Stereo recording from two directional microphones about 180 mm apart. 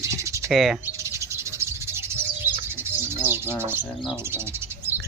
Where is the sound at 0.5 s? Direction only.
Centre (ahead or behind).